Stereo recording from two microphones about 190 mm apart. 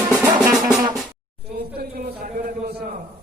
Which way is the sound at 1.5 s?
50° right (ahead or behind).